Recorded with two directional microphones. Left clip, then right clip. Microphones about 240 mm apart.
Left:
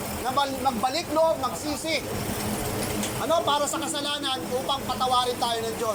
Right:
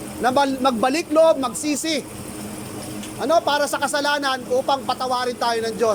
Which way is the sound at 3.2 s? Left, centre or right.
Right.